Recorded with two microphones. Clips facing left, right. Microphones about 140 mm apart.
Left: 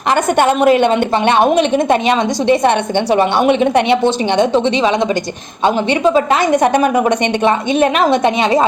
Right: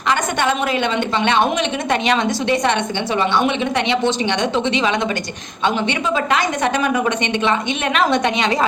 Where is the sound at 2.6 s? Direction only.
55° left (ahead or behind); by 8.6 s 30° left (ahead or behind).